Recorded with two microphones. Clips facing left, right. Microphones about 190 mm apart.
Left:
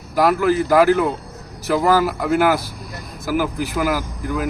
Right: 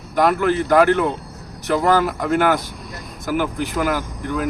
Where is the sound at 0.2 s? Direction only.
5° left (ahead or behind).